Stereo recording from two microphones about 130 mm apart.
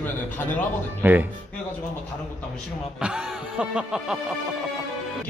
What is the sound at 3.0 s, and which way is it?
Music, 5° right (ahead or behind).